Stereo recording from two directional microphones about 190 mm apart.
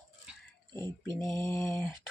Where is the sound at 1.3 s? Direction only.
15° left (ahead or behind).